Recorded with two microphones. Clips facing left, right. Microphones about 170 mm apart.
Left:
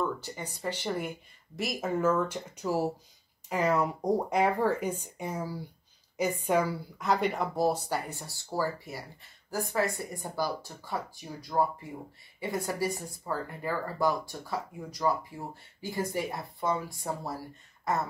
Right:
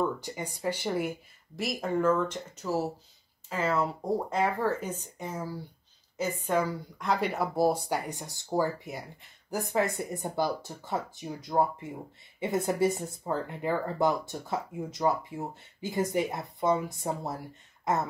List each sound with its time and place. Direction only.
0.0 s speech: 15° right (ahead or behind)
1.6 s speech: centre (ahead or behind); by 18.0 s 20° right (ahead or behind)